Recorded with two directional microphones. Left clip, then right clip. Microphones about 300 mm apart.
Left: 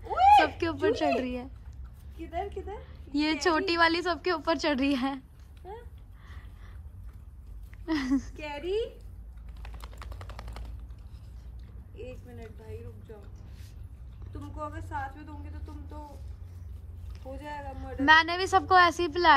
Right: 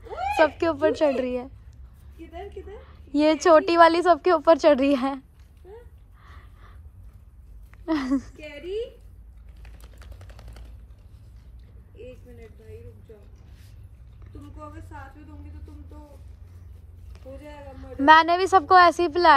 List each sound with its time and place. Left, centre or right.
0.0 s a sound: centre
0.5 s a woman's voice: centre
2.1 s a woman's voice: left
2.7 s a woman's voice: centre
5.6 s a sound: centre
7.8 s a woman's voice: centre
11.9 s boat: centre
14.6 s a woman's voice: centre